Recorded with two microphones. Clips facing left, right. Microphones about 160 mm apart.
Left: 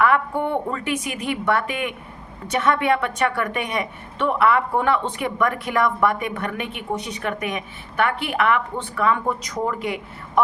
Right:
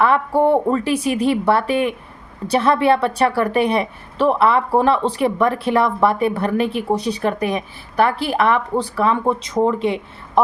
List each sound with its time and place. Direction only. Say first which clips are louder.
0.0 s a woman's voice: right 4 dB; 30° right (ahead or behind)